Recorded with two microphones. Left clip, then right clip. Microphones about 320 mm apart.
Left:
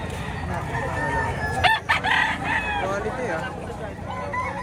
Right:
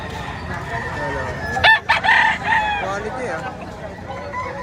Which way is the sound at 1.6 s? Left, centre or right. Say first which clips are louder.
Right 7 dB; right.